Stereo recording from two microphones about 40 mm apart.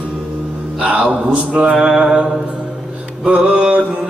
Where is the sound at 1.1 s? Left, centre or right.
Right.